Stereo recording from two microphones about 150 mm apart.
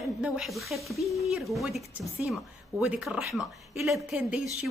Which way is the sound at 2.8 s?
5° right (ahead or behind).